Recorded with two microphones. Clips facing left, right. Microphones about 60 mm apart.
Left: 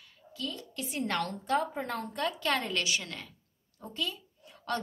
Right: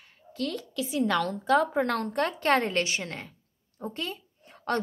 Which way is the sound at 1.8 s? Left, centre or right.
Right.